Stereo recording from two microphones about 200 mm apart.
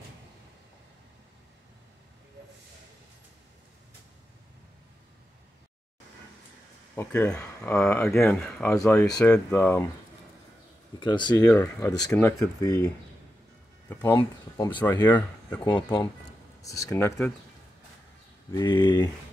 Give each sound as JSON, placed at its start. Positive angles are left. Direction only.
{"t": 7.0, "sound": "speech", "side_deg": 15}
{"t": 11.0, "sound": "speech", "side_deg": 25}
{"t": 15.6, "sound": "speech", "side_deg": 20}
{"t": 18.5, "sound": "speech", "side_deg": 20}